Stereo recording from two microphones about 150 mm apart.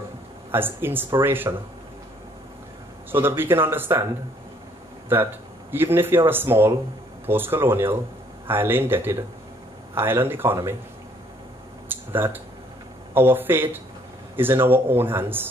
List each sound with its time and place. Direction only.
0.5 s speech: 15° right (ahead or behind)
3.1 s speech: 15° right (ahead or behind)
5.1 s speech: 15° right (ahead or behind)
11.9 s speech: 15° right (ahead or behind)